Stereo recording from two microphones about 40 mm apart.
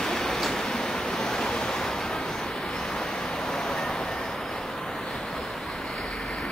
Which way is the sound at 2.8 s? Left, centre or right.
Centre.